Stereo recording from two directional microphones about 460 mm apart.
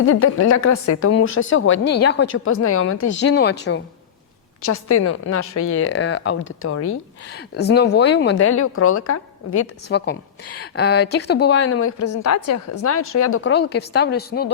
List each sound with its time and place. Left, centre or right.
0.1 s a woman's voice: left